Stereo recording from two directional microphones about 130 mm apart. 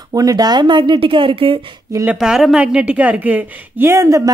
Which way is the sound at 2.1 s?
5° right (ahead or behind).